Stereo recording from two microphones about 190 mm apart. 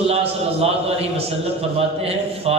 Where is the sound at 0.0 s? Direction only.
30° right (ahead or behind).